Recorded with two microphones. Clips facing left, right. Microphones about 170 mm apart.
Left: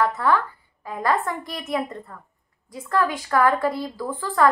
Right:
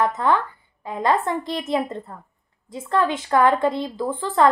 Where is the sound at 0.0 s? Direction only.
20° right (ahead or behind).